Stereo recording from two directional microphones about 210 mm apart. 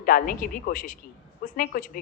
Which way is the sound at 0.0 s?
40° left (ahead or behind).